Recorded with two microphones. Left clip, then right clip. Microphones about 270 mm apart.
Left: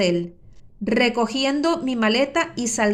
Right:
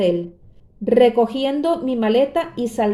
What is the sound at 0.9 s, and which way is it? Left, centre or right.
A woman's voice, left.